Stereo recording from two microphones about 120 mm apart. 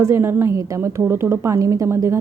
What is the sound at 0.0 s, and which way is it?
A woman's voice, 20° right (ahead or behind).